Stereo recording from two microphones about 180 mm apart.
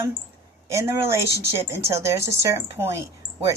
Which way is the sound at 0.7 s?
15° right (ahead or behind).